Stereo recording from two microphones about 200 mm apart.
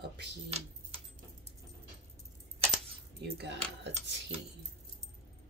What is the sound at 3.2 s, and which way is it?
Speech, 55° right (ahead or behind).